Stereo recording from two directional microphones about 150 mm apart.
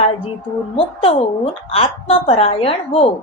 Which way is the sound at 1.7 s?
40° left (ahead or behind).